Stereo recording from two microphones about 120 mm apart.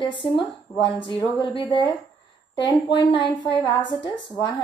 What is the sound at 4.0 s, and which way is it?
Speech, 40° left (ahead or behind).